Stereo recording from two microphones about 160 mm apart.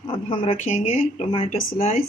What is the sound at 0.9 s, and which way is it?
Speech, 35° left (ahead or behind).